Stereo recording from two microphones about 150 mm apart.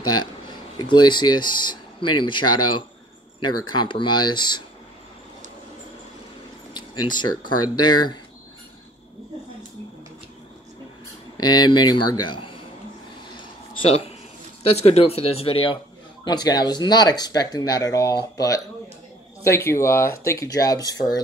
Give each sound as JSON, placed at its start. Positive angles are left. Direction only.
{"t": 0.0, "sound": "speech", "side_deg": 30}
{"t": 7.7, "sound": "speech", "side_deg": 30}
{"t": 11.3, "sound": "speech", "side_deg": 25}
{"t": 13.7, "sound": "speech", "side_deg": 40}